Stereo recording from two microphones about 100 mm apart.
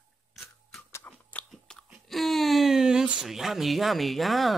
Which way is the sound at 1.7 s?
5° left (ahead or behind).